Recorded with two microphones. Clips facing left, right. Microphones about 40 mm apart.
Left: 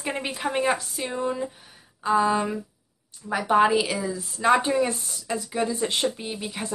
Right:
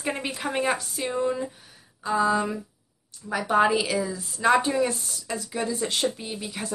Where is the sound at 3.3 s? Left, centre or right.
Centre.